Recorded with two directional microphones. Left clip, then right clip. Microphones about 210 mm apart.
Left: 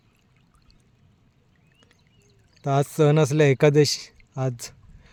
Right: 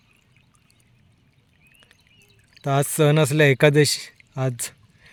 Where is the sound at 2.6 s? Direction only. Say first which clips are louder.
Right 1 dB; 5° left (ahead or behind).